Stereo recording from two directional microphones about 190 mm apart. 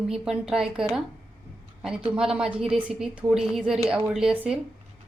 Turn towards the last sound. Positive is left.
turn(degrees=-5)  # may be behind; listen again after turning